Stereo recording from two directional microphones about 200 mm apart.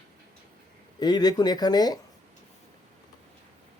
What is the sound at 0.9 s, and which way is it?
Speech, 20° left (ahead or behind).